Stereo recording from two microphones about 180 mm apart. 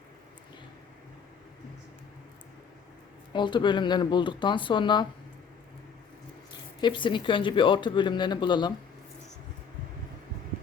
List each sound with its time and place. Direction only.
3.3 s speech: 25° left (ahead or behind)
6.8 s speech: 25° left (ahead or behind)